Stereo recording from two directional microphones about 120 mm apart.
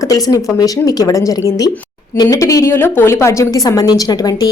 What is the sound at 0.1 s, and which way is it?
A woman's voice, 30° left (ahead or behind).